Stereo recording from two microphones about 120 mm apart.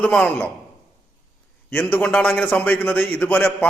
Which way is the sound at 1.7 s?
15° left (ahead or behind).